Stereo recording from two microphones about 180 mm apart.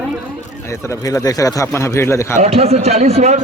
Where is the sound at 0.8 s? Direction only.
20° left (ahead or behind).